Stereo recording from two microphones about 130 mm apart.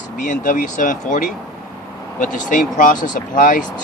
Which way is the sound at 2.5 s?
90° left.